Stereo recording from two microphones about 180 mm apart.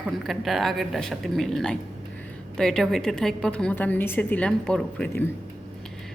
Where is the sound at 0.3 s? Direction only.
Centre (ahead or behind).